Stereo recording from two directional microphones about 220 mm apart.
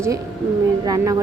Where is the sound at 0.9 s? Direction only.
15° right (ahead or behind).